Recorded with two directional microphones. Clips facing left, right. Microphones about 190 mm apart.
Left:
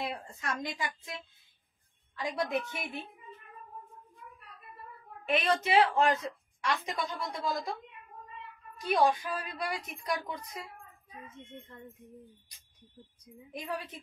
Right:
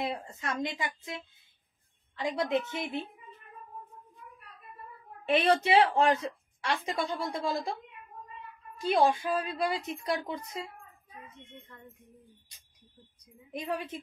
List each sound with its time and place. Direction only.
0.0 s a woman's voice: 25° right (ahead or behind)
5.2 s a woman's voice: 30° right (ahead or behind)
8.7 s a woman's voice: 25° right (ahead or behind)
11.2 s a child's voice: 25° left (ahead or behind)
13.5 s a woman's voice: 25° right (ahead or behind)